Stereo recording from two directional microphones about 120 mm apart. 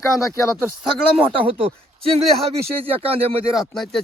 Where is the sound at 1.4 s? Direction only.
55° right (ahead or behind).